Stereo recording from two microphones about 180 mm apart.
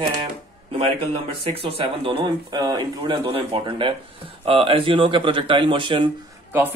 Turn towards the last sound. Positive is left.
turn(degrees=-10)  # may be behind; listen again after turning